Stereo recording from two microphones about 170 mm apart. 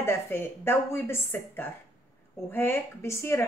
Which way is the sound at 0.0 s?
15° left (ahead or behind).